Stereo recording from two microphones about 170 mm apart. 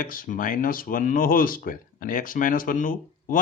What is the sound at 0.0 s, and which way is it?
Speech, 55° left (ahead or behind).